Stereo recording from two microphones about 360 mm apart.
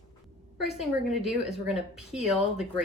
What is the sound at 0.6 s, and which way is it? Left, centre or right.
A woman's voice, centre.